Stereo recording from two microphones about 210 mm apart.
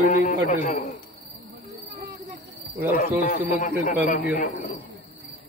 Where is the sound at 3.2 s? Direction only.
40° left (ahead or behind).